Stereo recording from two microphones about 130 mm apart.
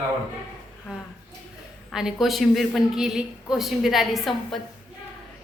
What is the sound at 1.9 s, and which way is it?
A woman's voice, 5° right (ahead or behind).